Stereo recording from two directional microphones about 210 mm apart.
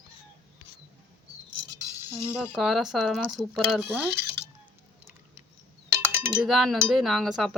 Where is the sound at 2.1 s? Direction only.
5° right (ahead or behind).